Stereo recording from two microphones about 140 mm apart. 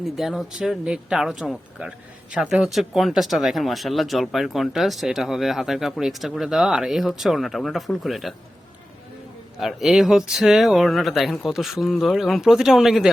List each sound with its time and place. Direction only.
0.0 s speech: centre (ahead or behind)
9.6 s speech: centre (ahead or behind)